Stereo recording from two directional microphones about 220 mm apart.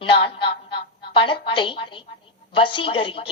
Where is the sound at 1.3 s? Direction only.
25° left (ahead or behind).